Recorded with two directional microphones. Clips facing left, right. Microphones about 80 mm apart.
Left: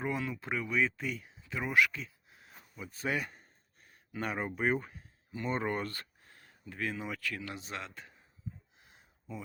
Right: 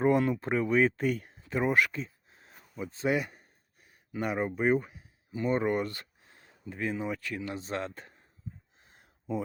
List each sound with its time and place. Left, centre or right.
0.0 s speech: right
7.6 s speech: right
9.0 s a sound: right